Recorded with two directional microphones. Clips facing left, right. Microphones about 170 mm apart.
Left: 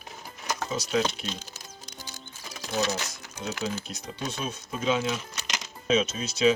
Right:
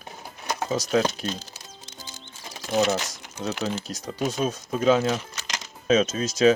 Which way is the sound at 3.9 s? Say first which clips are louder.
Right 7 dB; 45° right (ahead or behind).